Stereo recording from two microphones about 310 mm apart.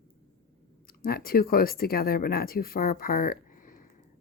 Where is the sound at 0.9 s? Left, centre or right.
Left.